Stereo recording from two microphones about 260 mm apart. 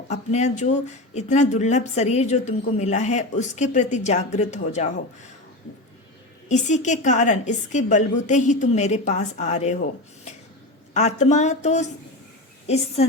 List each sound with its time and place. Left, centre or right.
0.1 s a woman's voice: left
6.5 s a woman's voice: left
10.9 s a woman's voice: left